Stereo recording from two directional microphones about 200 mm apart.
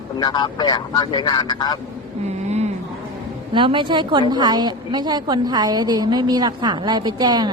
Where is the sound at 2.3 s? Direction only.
35° right (ahead or behind).